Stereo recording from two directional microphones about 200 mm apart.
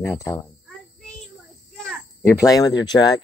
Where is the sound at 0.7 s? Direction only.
Centre (ahead or behind).